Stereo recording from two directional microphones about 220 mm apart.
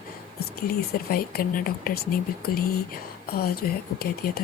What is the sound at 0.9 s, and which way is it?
Speech, 40° left (ahead or behind).